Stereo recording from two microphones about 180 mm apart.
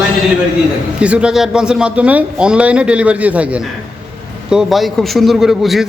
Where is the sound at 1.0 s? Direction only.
5° right (ahead or behind).